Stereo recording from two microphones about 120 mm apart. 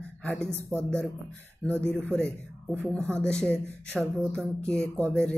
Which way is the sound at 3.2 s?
10° left (ahead or behind).